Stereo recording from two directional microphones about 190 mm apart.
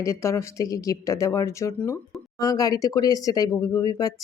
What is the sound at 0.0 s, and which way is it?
Speech, 15° left (ahead or behind).